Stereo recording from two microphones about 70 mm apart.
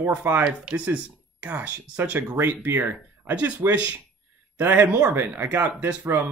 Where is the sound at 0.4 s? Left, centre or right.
Centre.